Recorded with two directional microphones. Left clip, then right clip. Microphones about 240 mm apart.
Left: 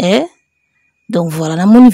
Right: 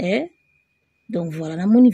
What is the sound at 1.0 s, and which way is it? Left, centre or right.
Speech, left.